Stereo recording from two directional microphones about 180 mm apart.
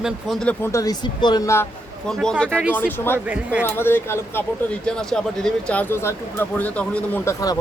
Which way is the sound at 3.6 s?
10° left (ahead or behind).